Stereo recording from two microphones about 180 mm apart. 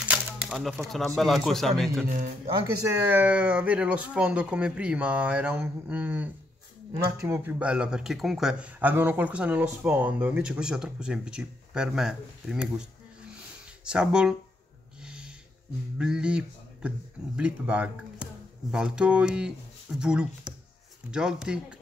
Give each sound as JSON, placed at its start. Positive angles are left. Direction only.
{"t": 0.1, "sound": "speech", "side_deg": 0}
{"t": 2.0, "sound": "speech", "side_deg": -50}
{"t": 3.0, "sound": "speech", "side_deg": -10}
{"t": 13.8, "sound": "speech", "side_deg": -5}
{"t": 15.0, "sound": "a sound", "side_deg": -5}
{"t": 16.0, "sound": "speech", "side_deg": -5}